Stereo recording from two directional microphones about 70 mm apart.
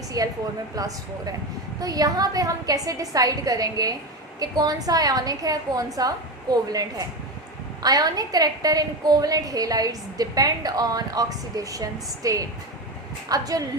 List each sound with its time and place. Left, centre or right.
0.2 s a woman's voice: right